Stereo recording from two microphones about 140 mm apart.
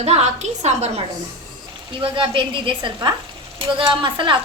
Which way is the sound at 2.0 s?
35° right (ahead or behind).